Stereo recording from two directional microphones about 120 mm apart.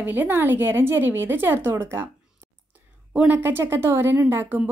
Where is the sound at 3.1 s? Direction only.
15° right (ahead or behind).